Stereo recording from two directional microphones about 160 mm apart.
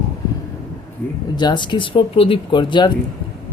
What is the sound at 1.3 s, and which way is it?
Speech, 30° left (ahead or behind).